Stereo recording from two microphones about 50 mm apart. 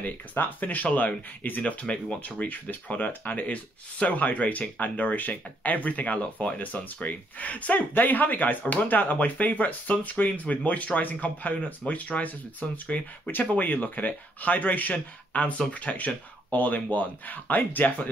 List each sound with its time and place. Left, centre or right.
0.0 s speech: left
12.8 s speech: left
13.6 s speech: left